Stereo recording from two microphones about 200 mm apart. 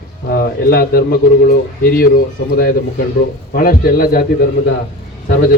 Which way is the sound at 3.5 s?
50° left (ahead or behind).